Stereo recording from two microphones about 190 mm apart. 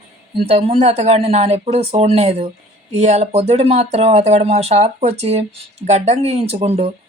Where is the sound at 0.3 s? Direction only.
30° right (ahead or behind).